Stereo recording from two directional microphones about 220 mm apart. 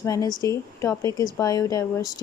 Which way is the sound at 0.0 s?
15° left (ahead or behind).